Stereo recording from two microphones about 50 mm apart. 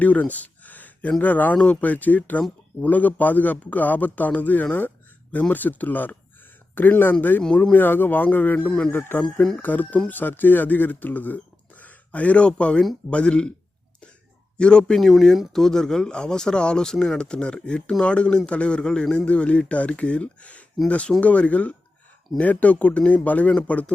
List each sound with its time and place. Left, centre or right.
0.0 s a sound: left
1.2 s a man's voice: left
1.5 s a man's voice: left
7.5 s speech: left
7.8 s a man's voice: left
8.9 s speech: left
9.2 s speech: centre
9.6 s a man's voice: left
14.6 s speech: centre
14.9 s speech: centre; by 23.9 s left